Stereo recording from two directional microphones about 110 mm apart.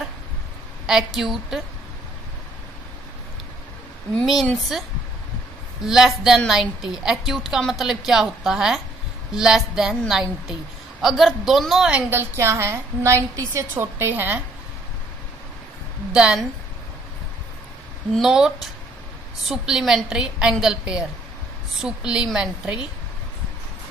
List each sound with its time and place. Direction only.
0.8 s a woman's voice: 5° right (ahead or behind)
4.7 s a woman's voice: 5° right (ahead or behind)
11.9 s a woman's voice: 20° right (ahead or behind)
16.1 s a woman's voice: 10° right (ahead or behind)
18.1 s a woman's voice: 5° right (ahead or behind)